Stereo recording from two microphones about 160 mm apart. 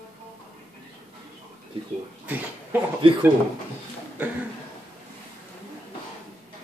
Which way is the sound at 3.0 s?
35° right (ahead or behind).